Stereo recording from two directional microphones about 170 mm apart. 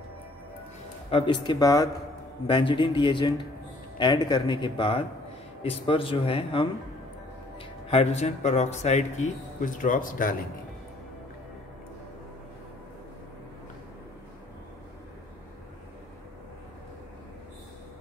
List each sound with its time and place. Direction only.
1.1 s speech: 25° left (ahead or behind)
7.9 s speech: 40° left (ahead or behind)